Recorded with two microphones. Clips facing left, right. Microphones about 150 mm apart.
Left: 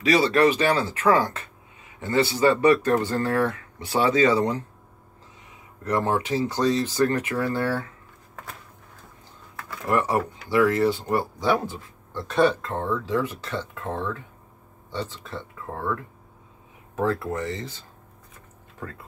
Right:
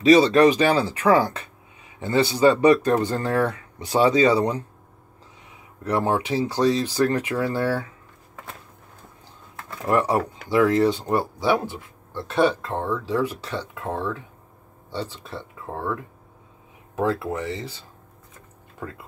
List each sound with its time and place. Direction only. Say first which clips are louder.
0.0 s speech: right 5 dB; 20° right (ahead or behind)
5.9 s speech: right 1 dB; 15° right (ahead or behind)
9.6 s a sound: right 2 dB; 25° right (ahead or behind)
10.5 s speech: right 2 dB; 20° right (ahead or behind)
14.9 s speech: right 1 dB; 10° right (ahead or behind)